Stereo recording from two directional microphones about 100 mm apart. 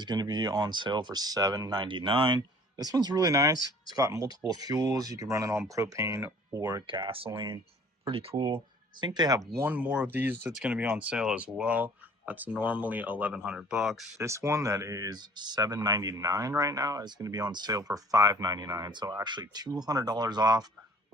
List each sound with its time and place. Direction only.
0.0 s speech: 45° right (ahead or behind)
1.8 s speech: 55° right (ahead or behind); by 6.8 s 35° right (ahead or behind)
6.8 s speech: 60° right (ahead or behind)
9.0 s speech: 45° right (ahead or behind)
9.5 s speech: 25° right (ahead or behind)
9.7 s speech: 15° right (ahead or behind)
14.2 s speech: 30° right (ahead or behind)